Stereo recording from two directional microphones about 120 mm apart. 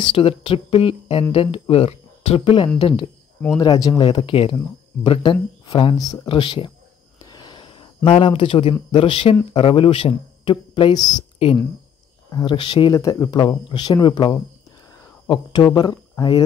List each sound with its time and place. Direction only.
0.0 s speech: 50° left (ahead or behind)
3.5 s speech: 35° left (ahead or behind)
5.9 s speech: 30° left (ahead or behind)
6.2 s speech: 45° left (ahead or behind)
7.2 s a sound: 35° left (ahead or behind)
8.1 s speech: 50° left (ahead or behind); by 11.2 s 35° left (ahead or behind)
12.3 s speech: 40° left (ahead or behind)